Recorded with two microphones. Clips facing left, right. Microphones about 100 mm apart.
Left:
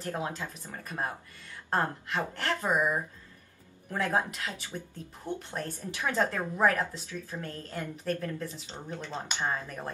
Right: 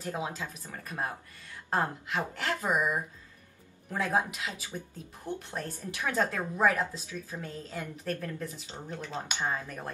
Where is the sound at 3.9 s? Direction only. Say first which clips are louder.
Even; 10° right (ahead or behind).